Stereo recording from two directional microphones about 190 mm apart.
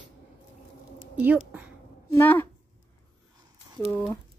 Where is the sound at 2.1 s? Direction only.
10° left (ahead or behind).